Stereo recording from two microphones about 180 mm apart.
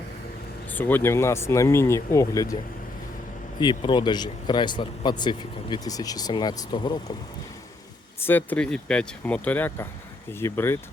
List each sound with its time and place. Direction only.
0.7 s speech: 10° left (ahead or behind)
3.6 s speech: 25° left (ahead or behind)
8.2 s speech: 10° left (ahead or behind)